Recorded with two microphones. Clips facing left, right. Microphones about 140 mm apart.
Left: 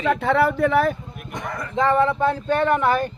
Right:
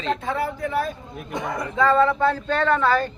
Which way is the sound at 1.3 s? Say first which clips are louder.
Right 3 dB; 15° right (ahead or behind).